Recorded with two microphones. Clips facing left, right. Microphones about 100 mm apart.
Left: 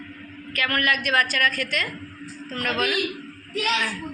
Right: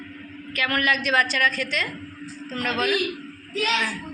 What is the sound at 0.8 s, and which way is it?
A woman's voice, 5° left (ahead or behind).